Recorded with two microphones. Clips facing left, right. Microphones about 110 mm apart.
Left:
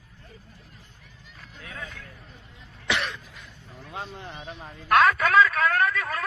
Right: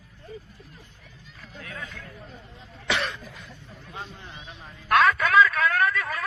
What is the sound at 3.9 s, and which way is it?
Speech, 50° left (ahead or behind).